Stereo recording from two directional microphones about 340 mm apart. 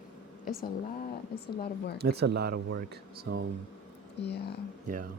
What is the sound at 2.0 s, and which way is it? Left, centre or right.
Speech, right.